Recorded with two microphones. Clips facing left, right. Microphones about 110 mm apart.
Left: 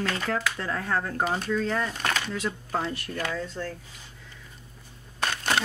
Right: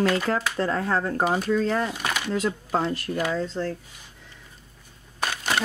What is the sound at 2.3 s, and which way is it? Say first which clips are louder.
Speech: right 5 dB; 35° right (ahead or behind).